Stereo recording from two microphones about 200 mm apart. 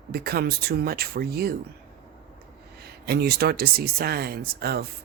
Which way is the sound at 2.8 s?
55° right (ahead or behind).